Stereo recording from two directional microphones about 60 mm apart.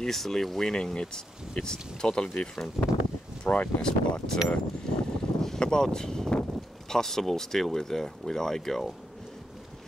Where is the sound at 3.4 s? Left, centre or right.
Left.